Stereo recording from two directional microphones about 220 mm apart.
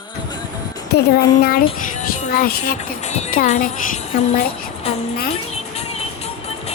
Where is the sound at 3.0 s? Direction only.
30° left (ahead or behind).